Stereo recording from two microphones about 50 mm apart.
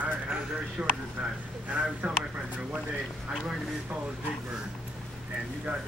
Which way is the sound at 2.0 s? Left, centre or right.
Right.